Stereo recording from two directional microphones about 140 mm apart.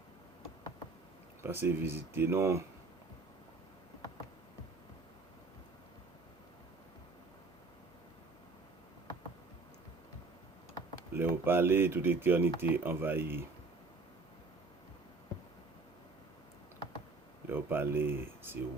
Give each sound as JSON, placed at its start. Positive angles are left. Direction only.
{"t": 1.4, "sound": "speech", "side_deg": -15}
{"t": 11.1, "sound": "speech", "side_deg": -15}
{"t": 17.4, "sound": "speech", "side_deg": -15}